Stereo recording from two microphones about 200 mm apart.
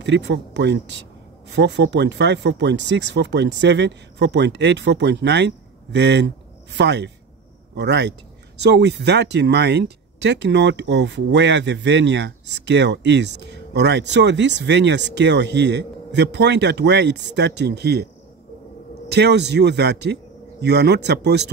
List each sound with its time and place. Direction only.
0.0 s speech: 60° right (ahead or behind)
19.0 s speech: 55° right (ahead or behind)